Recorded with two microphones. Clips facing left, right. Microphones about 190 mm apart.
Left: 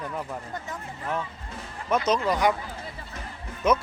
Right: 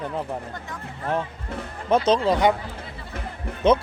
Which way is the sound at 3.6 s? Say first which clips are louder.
Right 5 dB; 30° right (ahead or behind).